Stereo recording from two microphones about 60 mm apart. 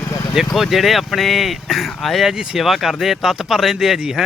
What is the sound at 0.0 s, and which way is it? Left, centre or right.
Vehicle, left.